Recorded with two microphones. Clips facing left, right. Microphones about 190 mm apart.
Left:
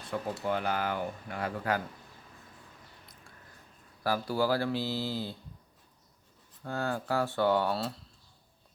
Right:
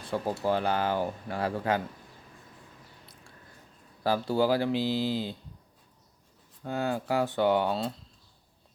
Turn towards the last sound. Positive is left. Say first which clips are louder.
# right 2 dB
turn(degrees=-15)  # may be behind; listen again after turning